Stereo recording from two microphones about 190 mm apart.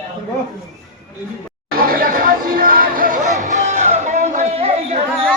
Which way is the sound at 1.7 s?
50° right (ahead or behind).